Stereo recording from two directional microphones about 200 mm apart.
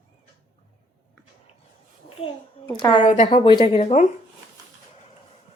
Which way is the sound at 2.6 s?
20° left (ahead or behind).